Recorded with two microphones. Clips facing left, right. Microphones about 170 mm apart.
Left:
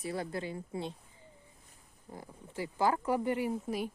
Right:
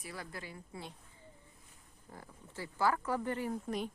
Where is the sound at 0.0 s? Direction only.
25° left (ahead or behind).